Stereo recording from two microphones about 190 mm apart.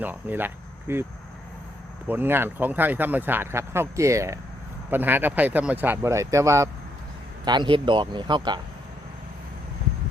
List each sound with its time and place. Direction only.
0.0 s speech: 10° right (ahead or behind)
2.0 s speech: 10° right (ahead or behind)